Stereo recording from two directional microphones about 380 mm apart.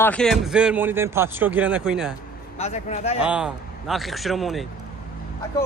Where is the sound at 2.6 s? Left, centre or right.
Centre.